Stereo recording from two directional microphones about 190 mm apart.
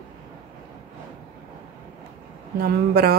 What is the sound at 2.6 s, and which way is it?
Speech, 55° right (ahead or behind).